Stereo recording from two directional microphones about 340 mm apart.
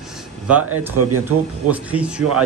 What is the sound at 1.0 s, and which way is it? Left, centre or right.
Speech, right.